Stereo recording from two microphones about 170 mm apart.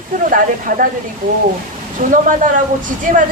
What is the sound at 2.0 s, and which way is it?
Speech, 50° right (ahead or behind).